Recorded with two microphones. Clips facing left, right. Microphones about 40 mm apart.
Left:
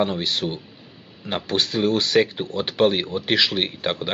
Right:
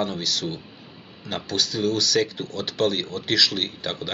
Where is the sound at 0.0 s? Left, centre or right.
Left.